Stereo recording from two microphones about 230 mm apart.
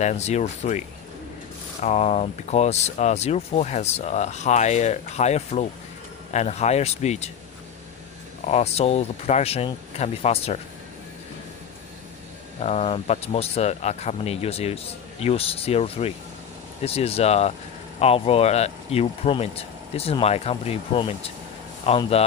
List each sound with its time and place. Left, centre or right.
0.0 s speech: left
8.5 s speech: left
12.5 s speech: left